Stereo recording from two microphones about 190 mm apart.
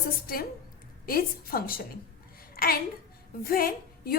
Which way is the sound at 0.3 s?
50° left (ahead or behind).